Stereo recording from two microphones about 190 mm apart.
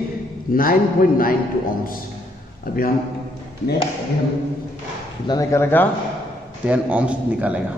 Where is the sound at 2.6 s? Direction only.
50° left (ahead or behind).